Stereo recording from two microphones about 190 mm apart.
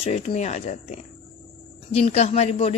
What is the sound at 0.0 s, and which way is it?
Speech, 35° left (ahead or behind).